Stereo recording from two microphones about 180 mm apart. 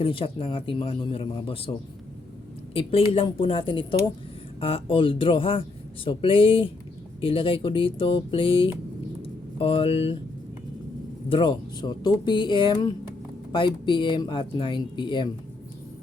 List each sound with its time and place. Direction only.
0.0 s speech: 30° left (ahead or behind)
2.7 s speech: 30° left (ahead or behind)
9.2 s a sound: 30° left (ahead or behind)
11.3 s speech: 25° left (ahead or behind)